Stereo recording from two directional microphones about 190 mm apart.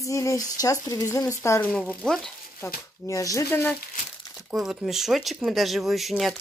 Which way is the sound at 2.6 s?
15° left (ahead or behind).